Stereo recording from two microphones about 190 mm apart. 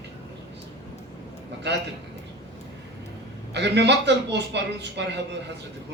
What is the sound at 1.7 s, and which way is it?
Speech, 65° right (ahead or behind).